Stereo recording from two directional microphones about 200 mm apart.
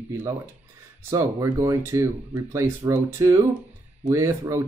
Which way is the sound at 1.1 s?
15° right (ahead or behind).